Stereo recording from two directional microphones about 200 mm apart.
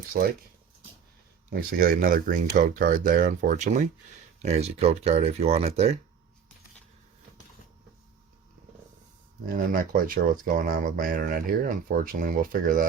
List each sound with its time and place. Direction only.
0.1 s speech: 45° right (ahead or behind)
1.5 s speech: 45° right (ahead or behind)
4.4 s speech: 30° right (ahead or behind)
9.5 s speech: 45° right (ahead or behind)